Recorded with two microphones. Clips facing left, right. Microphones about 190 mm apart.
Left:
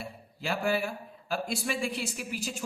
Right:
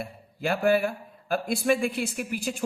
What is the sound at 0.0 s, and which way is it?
A man's voice, 55° right (ahead or behind).